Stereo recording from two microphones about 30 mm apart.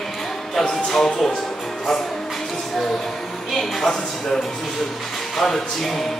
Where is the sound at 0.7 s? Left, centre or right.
Centre.